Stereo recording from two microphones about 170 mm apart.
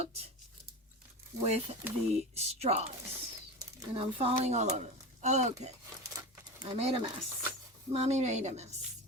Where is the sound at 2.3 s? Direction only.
40° right (ahead or behind).